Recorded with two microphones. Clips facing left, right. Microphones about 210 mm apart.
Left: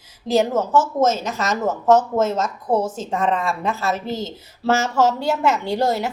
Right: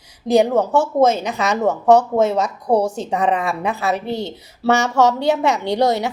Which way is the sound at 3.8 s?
65° right (ahead or behind).